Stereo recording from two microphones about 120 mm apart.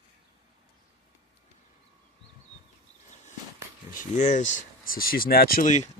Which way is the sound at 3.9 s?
85° left.